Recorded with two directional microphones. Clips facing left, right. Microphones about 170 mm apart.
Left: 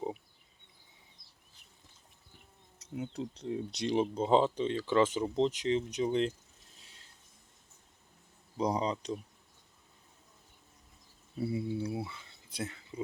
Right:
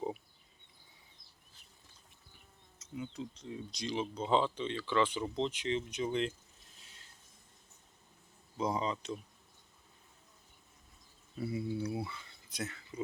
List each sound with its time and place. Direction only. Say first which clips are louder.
2.7 s speech: left 4 dB; 60° left (ahead or behind); by 6.3 s 35° left (ahead or behind)
8.5 s speech: left 3 dB; 35° left (ahead or behind)
11.3 s speech: left 3 dB; 30° left (ahead or behind)